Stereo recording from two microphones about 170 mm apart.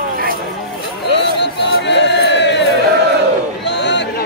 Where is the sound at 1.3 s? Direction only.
90° left.